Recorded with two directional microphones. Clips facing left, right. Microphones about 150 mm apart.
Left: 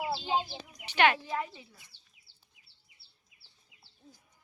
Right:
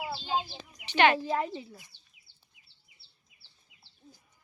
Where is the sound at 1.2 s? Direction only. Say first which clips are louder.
Right 5 dB; 35° right (ahead or behind).